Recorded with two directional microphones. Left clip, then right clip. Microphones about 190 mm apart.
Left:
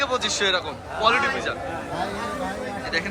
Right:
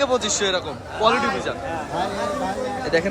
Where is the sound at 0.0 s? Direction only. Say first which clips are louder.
Right 2 dB; 20° right (ahead or behind).